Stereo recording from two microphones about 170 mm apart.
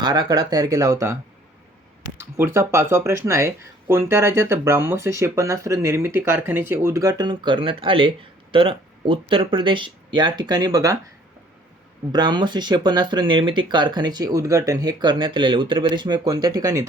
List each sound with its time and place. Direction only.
0.0 s speech: 25° right (ahead or behind)
2.1 s speech: 15° right (ahead or behind)
12.1 s speech: 25° right (ahead or behind)